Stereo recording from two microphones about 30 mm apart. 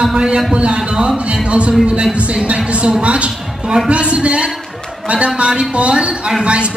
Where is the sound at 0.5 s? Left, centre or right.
Right.